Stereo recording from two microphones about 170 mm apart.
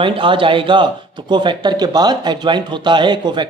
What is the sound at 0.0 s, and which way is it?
Speech, 30° right (ahead or behind).